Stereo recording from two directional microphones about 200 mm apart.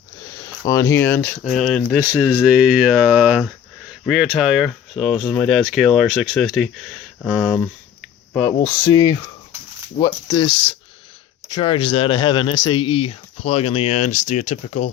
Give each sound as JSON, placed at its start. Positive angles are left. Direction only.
{"t": 0.4, "sound": "speech", "side_deg": 15}
{"t": 8.3, "sound": "speech", "side_deg": 10}